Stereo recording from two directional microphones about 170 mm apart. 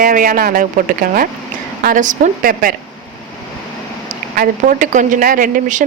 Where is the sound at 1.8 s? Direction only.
50° right (ahead or behind).